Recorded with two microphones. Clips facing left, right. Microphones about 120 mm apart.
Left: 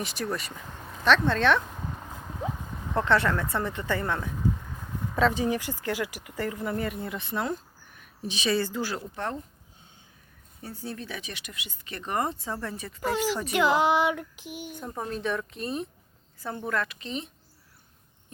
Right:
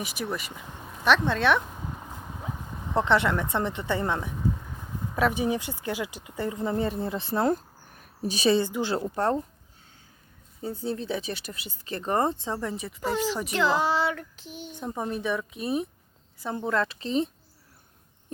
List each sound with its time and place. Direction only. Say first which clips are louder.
0.0 s speech: left 1 dB; 10° right (ahead or behind)
2.3 s clip-clop: left 5 dB; 5° right (ahead or behind)
3.0 s speech: right 1 dB; 15° right (ahead or behind); by 8.5 s 40° right (ahead or behind)
8.5 s speech: right 3 dB; 20° right (ahead or behind)
9.0 s speech: right 8 dB; 40° right (ahead or behind)
10.6 s speech: right 6 dB; 20° right (ahead or behind)
12.5 s speech: right 3 dB; 15° right (ahead or behind)
13.1 s speech: even; 10° left (ahead or behind)
14.8 s speech: right 4 dB; 15° right (ahead or behind)
16.4 s speech: right 3 dB; 20° right (ahead or behind)